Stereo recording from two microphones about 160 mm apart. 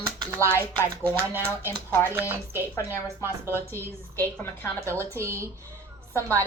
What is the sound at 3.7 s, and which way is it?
Speech, 15° left (ahead or behind).